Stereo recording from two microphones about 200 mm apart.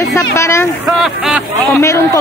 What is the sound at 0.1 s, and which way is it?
Speech, 15° left (ahead or behind).